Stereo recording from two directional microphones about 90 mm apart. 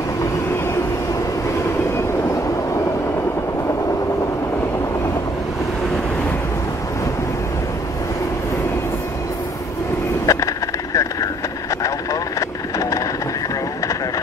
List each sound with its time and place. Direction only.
2.0 s vehicle: 35° left (ahead or behind)
10.2 s vehicle: 40° left (ahead or behind)